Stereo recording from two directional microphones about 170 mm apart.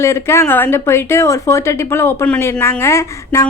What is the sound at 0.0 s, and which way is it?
A woman's voice, 15° left (ahead or behind).